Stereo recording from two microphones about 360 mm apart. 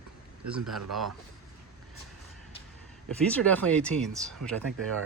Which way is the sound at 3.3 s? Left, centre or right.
Centre.